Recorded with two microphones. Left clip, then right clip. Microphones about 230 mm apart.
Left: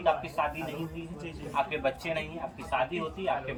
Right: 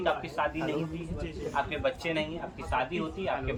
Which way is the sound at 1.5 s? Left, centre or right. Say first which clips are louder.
Left 1 dB; centre.